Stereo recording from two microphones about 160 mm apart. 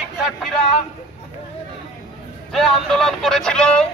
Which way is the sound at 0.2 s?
Centre (ahead or behind).